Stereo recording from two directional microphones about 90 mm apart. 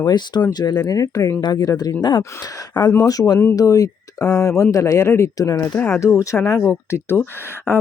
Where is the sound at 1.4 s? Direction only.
50° left (ahead or behind); by 5.3 s 30° left (ahead or behind).